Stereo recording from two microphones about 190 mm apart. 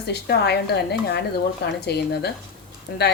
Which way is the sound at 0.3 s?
60° left (ahead or behind).